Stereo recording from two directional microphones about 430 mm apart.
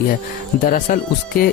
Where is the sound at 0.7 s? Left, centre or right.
Centre.